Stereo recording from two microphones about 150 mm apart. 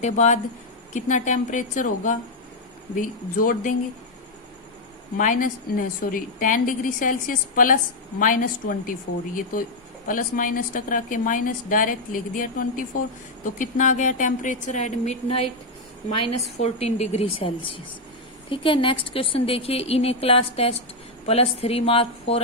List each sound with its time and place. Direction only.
0.0 s a woman's voice: 50° left (ahead or behind)
5.1 s a woman's voice: 60° left (ahead or behind); by 22.4 s 40° left (ahead or behind)